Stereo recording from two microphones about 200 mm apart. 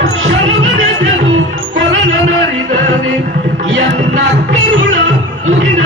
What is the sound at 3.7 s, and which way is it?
Music, 65° right (ahead or behind).